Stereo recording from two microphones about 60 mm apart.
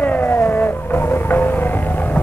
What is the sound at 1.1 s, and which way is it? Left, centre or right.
Music, left.